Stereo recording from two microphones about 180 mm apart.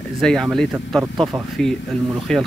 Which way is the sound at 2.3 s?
5° left (ahead or behind).